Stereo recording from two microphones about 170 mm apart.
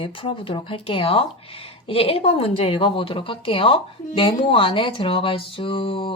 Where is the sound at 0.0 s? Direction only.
30° left (ahead or behind).